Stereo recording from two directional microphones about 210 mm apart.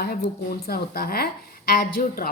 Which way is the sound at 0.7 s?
45° left (ahead or behind).